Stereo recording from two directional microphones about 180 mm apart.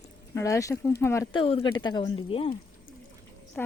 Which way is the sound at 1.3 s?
30° left (ahead or behind).